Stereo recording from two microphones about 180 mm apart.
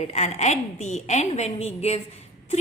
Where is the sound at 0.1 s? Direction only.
40° left (ahead or behind).